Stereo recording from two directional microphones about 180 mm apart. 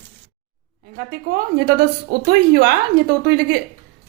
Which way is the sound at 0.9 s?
60° right (ahead or behind).